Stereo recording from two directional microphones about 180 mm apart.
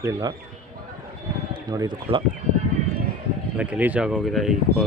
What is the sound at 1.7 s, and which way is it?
Speech, 20° right (ahead or behind).